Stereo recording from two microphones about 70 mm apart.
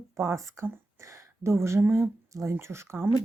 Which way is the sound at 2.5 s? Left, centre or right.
Right.